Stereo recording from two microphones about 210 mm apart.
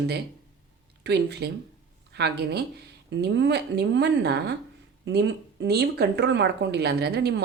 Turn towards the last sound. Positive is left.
turn(degrees=-50)  # may be behind; listen again after turning